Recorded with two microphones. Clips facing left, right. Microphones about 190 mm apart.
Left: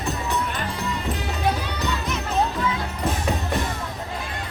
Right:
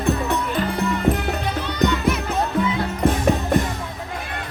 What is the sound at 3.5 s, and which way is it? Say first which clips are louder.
Music: right 6 dB; 50° right (ahead or behind).